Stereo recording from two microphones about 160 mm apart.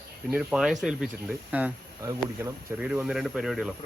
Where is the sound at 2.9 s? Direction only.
5° right (ahead or behind).